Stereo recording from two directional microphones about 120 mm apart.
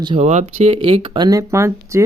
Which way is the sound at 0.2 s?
70° right (ahead or behind).